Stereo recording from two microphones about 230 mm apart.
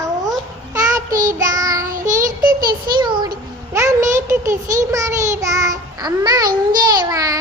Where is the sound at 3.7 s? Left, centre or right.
Centre.